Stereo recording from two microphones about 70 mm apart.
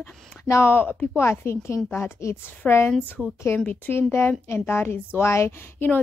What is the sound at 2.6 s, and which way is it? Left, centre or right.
A woman's voice, centre.